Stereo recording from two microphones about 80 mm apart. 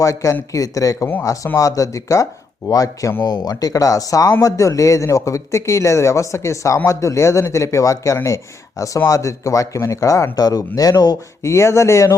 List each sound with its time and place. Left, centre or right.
0.0 s speech: left
3.2 s speech: left
11.4 s speech: left